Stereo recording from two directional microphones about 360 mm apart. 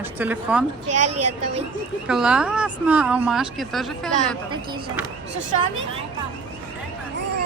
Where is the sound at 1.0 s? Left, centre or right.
Right.